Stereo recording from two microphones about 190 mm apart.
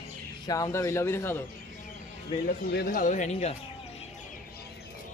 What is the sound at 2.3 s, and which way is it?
Speech, 25° left (ahead or behind).